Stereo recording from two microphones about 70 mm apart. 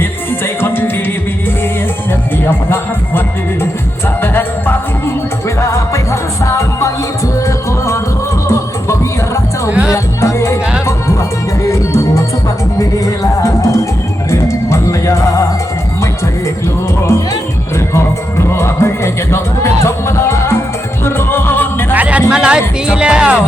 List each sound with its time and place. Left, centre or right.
0.6 s music: left
2.5 s speech: left
4.2 s music: left
5.5 s music: left
9.6 s music: right
9.9 s music: left
11.6 s music: left
17.9 s music: left
21.9 s music: centre